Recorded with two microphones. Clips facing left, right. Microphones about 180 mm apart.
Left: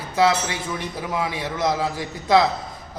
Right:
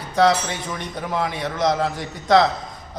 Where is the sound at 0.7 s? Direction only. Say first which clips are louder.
Right 2 dB; 5° left (ahead or behind).